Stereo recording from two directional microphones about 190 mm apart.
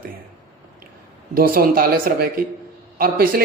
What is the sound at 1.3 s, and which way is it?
Speech, 50° right (ahead or behind).